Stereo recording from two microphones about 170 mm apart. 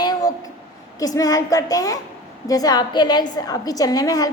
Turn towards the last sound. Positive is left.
turn(degrees=20)  # may be behind; listen again after turning